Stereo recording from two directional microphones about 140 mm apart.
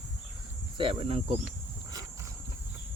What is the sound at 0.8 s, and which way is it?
Speech, 40° right (ahead or behind).